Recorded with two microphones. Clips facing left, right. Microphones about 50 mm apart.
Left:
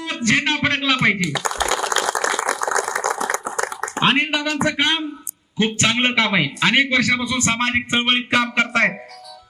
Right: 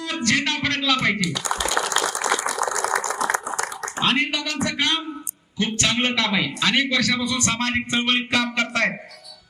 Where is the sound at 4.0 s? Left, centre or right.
Left.